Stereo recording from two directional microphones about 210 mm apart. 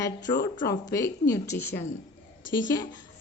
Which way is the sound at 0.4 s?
15° left (ahead or behind).